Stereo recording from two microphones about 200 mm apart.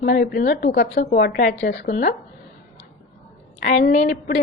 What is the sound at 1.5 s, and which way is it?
Speech, 60° left (ahead or behind).